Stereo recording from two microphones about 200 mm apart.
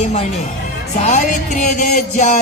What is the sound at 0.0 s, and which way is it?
Speech, 30° left (ahead or behind).